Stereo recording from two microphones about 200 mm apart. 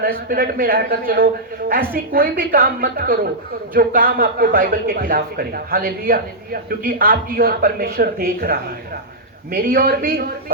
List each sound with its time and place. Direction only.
0.0 s a man's voice: 45° right (ahead or behind)